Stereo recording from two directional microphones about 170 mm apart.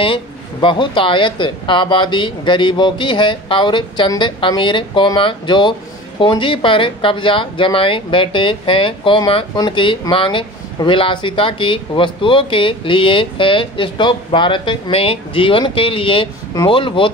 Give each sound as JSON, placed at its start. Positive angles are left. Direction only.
{"t": 0.0, "sound": "speech", "side_deg": 30}